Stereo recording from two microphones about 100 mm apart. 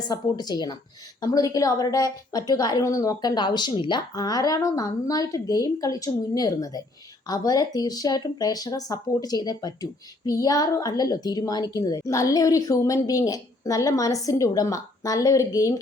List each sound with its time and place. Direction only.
0.1 s a woman's voice: 45° left (ahead or behind)